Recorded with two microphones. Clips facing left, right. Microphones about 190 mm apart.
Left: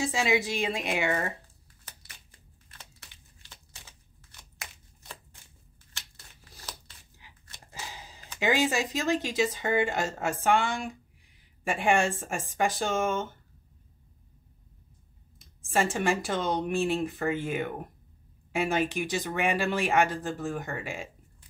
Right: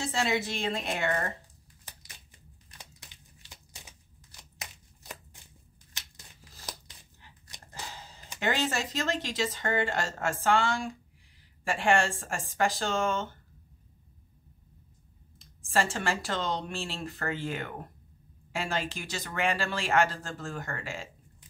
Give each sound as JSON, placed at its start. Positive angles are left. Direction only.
{"t": 0.0, "sound": "speech", "side_deg": 15}
{"t": 2.7, "sound": "crumpling", "side_deg": -15}
{"t": 5.9, "sound": "a sound", "side_deg": -15}
{"t": 7.9, "sound": "a sound", "side_deg": 15}
{"t": 8.4, "sound": "speech", "side_deg": 15}
{"t": 15.7, "sound": "speech", "side_deg": 15}